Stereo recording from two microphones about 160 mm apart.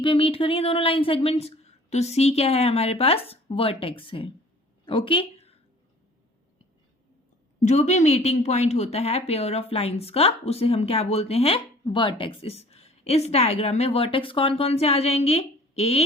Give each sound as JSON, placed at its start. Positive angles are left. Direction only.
{"t": 0.0, "sound": "a woman's voice", "side_deg": 35}
{"t": 7.6, "sound": "a woman's voice", "side_deg": 45}